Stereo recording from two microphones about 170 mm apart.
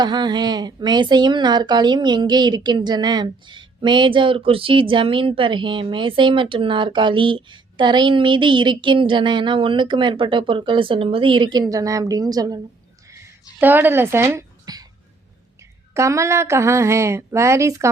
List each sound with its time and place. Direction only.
0.0 s speech: 25° right (ahead or behind)
13.6 s speech: 10° right (ahead or behind)
16.0 s speech: 15° right (ahead or behind)